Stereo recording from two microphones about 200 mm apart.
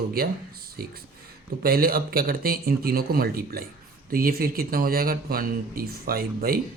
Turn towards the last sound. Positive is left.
turn(degrees=-50)  # may be behind; listen again after turning